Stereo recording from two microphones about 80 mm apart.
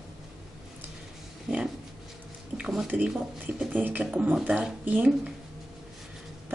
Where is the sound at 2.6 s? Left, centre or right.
Centre.